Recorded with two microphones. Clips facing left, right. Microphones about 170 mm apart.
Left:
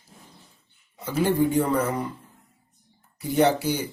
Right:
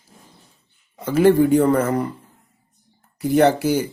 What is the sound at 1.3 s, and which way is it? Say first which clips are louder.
Speech: right 8 dB; 55° right (ahead or behind).